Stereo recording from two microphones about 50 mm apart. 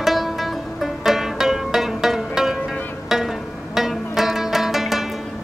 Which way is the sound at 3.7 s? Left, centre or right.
Centre.